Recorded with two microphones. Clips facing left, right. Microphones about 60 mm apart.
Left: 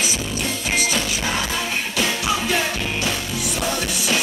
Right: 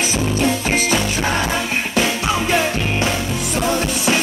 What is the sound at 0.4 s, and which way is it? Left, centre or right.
Music, right.